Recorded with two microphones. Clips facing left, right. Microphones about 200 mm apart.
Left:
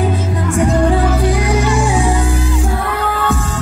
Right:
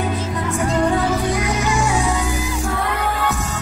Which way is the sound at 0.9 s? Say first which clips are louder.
Left 4 dB; 30° left (ahead or behind).